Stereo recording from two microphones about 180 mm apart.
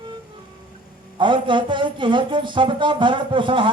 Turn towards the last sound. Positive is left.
turn(degrees=-25)  # may be behind; listen again after turning